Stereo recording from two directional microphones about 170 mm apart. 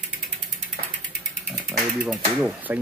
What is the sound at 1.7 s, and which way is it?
Speech, 5° right (ahead or behind).